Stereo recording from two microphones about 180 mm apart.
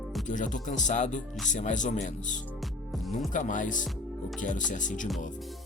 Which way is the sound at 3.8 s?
Centre (ahead or behind).